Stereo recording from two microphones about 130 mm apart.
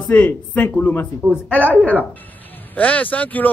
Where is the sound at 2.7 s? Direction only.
10° left (ahead or behind).